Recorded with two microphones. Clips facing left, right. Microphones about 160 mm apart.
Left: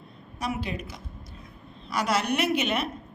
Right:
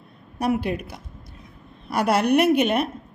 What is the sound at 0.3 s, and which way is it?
A woman's voice, 60° right (ahead or behind).